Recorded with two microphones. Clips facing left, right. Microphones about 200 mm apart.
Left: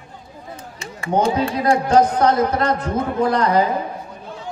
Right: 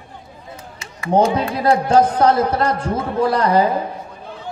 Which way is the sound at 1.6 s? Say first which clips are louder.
Right 1 dB; 30° right (ahead or behind).